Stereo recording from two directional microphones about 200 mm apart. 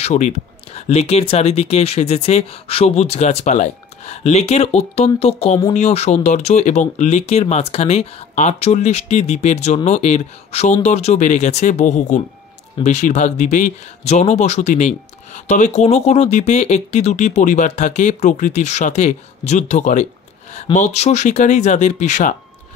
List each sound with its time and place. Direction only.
0.0 s speech: 35° left (ahead or behind)